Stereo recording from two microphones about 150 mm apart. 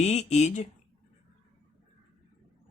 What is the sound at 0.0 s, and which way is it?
Speech, 50° left (ahead or behind).